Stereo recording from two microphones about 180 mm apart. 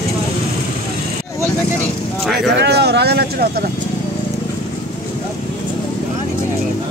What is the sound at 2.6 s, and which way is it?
Vehicle, 70° right (ahead or behind).